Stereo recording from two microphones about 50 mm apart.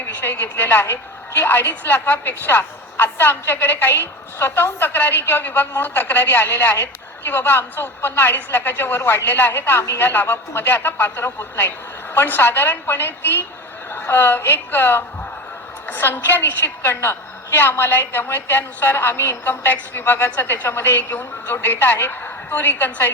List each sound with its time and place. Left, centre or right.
0.0 s a woman's voice: left
19.7 s a woman's voice: left